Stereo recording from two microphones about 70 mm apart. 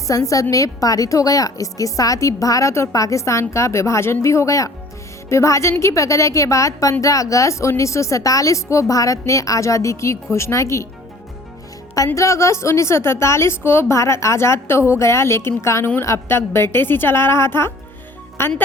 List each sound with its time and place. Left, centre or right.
0.1 s a woman's voice: left
12.1 s a woman's voice: left